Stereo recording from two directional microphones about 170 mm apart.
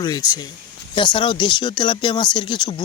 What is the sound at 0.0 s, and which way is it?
Speech, 25° left (ahead or behind).